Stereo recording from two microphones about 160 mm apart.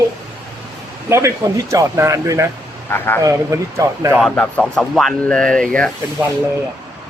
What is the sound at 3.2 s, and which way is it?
Speech, 20° right (ahead or behind).